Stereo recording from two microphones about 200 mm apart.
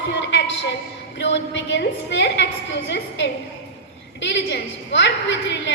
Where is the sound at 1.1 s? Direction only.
60° left (ahead or behind).